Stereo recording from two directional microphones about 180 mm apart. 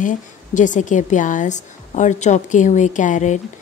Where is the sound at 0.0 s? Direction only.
45° left (ahead or behind).